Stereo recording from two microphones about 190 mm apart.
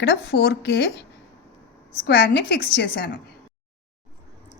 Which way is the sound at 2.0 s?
55° left (ahead or behind).